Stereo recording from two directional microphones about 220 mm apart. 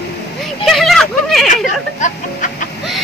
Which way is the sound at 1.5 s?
35° left (ahead or behind).